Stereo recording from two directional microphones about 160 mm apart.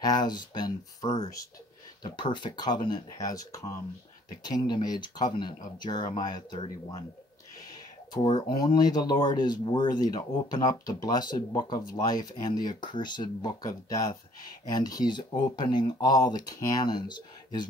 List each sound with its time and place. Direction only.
0.0 s speech: 25° left (ahead or behind)
8.4 s speech: 25° left (ahead or behind)